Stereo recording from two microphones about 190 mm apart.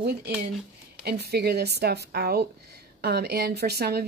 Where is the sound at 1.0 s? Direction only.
60° right (ahead or behind).